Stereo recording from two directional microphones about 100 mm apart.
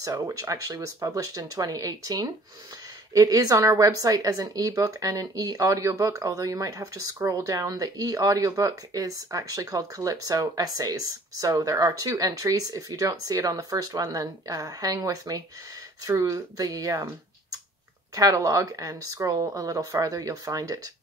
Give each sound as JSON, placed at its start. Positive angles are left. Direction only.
{"t": 0.0, "sound": "a woman's voice", "side_deg": -35}
{"t": 18.1, "sound": "a woman's voice", "side_deg": -35}